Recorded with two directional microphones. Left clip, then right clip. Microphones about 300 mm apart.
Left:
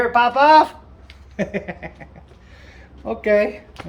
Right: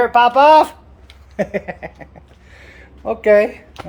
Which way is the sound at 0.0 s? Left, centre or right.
Right.